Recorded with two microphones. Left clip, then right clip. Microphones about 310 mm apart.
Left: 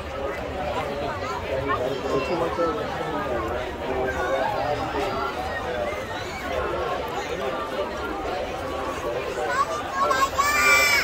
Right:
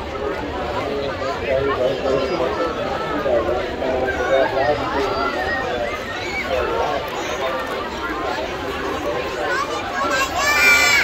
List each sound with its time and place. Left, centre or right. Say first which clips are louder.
10.1 s crowd: right 5 dB; right